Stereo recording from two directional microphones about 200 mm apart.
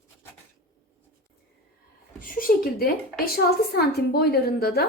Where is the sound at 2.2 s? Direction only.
45° left (ahead or behind).